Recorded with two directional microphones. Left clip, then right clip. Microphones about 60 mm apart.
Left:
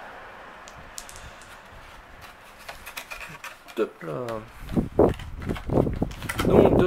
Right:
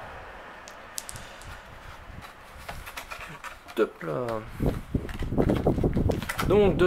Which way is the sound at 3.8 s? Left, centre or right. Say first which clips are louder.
Right 1 dB; centre.